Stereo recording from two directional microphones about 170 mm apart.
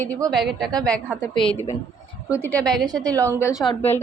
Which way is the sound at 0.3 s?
Centre (ahead or behind).